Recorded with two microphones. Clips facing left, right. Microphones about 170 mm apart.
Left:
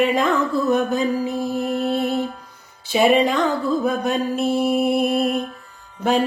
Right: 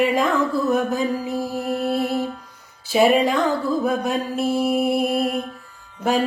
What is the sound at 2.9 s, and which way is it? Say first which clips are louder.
Music: even; 5° right (ahead or behind).